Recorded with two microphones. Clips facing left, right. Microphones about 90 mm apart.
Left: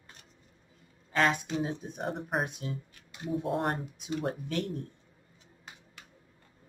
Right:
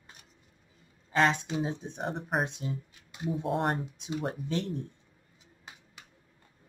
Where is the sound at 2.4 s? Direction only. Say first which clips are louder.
Right 2 dB; 25° right (ahead or behind).